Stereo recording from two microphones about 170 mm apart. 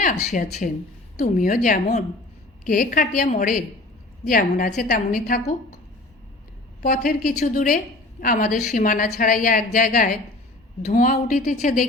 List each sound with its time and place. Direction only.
0.0 s a woman's voice: 50° left (ahead or behind)
6.8 s a woman's voice: 55° left (ahead or behind)